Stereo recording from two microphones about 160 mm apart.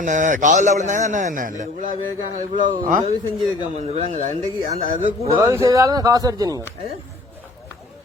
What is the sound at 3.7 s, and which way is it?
Speech, 45° right (ahead or behind).